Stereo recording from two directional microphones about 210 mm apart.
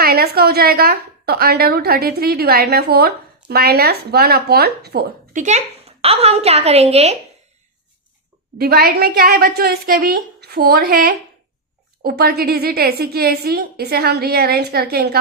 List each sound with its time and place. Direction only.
0.0 s a woman's voice: 45° right (ahead or behind); by 7.2 s 30° right (ahead or behind)
8.5 s a woman's voice: 45° right (ahead or behind)